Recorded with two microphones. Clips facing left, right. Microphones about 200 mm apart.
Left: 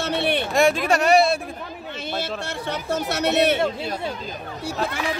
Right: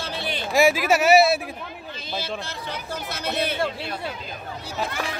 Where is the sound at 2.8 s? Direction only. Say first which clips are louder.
Left 9 dB; 70° left (ahead or behind).